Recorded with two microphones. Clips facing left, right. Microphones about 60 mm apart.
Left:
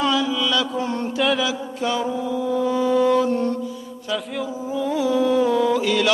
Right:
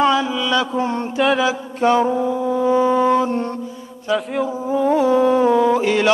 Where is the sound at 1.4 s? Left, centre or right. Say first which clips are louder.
Right 6 dB; right.